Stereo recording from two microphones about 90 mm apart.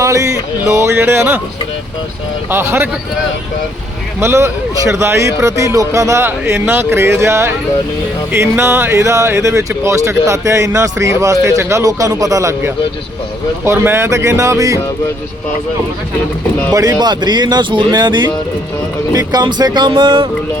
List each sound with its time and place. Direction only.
0.0 s music: 35° right (ahead or behind)
0.7 s speech: 30° right (ahead or behind)
2.5 s speech: 25° right (ahead or behind)
4.2 s speech: 30° right (ahead or behind)
16.7 s speech: 45° right (ahead or behind)
19.9 s music: 65° right (ahead or behind)